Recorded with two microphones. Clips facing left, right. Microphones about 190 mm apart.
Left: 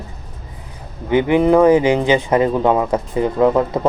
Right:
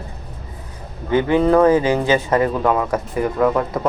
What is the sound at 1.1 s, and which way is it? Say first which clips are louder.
Speech: left 2 dB; 15° left (ahead or behind).